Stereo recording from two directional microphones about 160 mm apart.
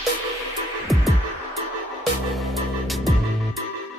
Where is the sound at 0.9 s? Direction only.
Centre (ahead or behind).